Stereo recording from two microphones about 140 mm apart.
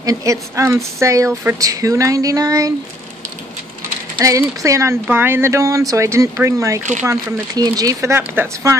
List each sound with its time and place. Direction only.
0.0 s a woman's voice: 25° right (ahead or behind)
4.2 s a woman's voice: 20° right (ahead or behind)